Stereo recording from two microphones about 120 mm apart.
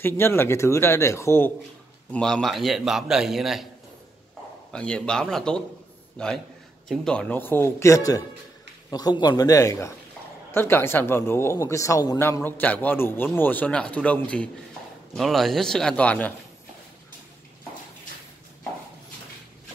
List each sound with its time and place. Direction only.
0.0 s speech: 20° left (ahead or behind)
2.0 s a man's voice: 10° left (ahead or behind)
4.7 s a man's voice: 5° left (ahead or behind); by 12.2 s 30° left (ahead or behind)
12.4 s a man's voice: 15° left (ahead or behind)